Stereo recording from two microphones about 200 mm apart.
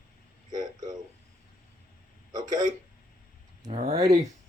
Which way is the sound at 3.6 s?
30° right (ahead or behind).